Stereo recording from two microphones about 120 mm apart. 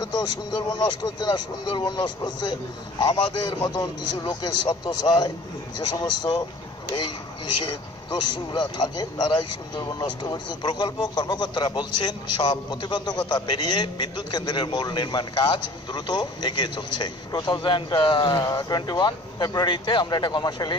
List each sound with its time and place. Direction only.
0.0 s a man's voice: 35° left (ahead or behind)
7.6 s a man's voice: 35° left (ahead or behind)